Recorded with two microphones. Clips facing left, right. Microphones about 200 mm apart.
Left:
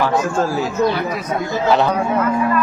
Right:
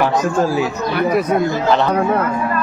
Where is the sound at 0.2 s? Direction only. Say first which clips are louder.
Right 2 dB; 15° right (ahead or behind).